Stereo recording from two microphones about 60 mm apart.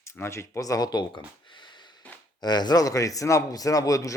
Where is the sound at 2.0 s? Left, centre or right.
Left.